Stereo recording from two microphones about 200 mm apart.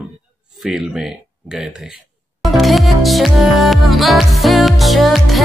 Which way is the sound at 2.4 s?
Centre (ahead or behind).